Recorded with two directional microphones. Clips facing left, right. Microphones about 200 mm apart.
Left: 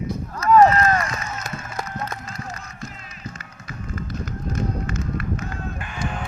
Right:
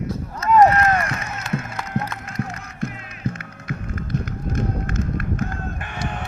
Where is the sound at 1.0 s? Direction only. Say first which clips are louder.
Right 1 dB; 65° right (ahead or behind).